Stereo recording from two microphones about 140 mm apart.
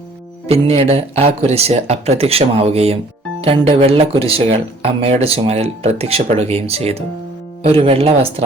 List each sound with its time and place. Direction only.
0.4 s speech: 45° right (ahead or behind)